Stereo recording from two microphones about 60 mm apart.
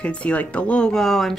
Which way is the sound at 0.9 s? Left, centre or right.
Centre.